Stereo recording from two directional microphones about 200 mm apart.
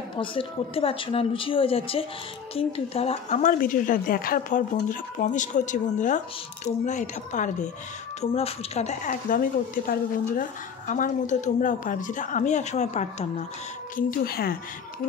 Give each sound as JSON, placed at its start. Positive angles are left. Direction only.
{"t": 0.1, "sound": "a woman's voice", "side_deg": 25}
{"t": 13.9, "sound": "speech", "side_deg": 50}